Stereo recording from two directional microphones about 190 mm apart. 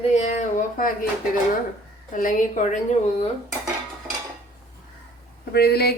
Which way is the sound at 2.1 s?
45° left (ahead or behind).